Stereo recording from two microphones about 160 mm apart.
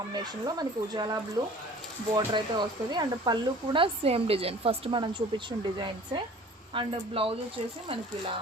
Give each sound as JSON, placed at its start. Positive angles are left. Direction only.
{"t": 0.1, "sound": "speech", "side_deg": -25}